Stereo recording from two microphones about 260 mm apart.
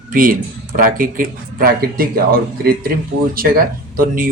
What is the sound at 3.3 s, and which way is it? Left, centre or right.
Speech, right.